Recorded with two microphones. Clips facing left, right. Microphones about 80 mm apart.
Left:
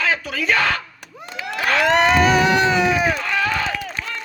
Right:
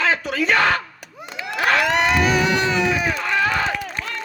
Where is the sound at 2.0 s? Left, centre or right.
Left.